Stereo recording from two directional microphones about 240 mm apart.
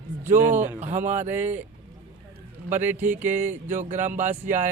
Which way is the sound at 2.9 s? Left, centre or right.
Centre.